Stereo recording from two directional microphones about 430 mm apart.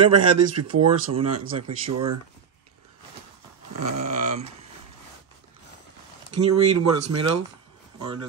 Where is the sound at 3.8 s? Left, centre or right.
Right.